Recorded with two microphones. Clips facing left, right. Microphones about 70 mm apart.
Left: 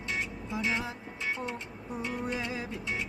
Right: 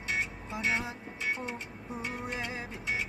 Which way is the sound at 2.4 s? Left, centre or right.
Right.